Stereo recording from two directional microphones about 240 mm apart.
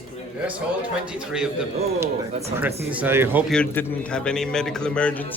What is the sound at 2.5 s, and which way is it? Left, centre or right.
A man's voice, centre.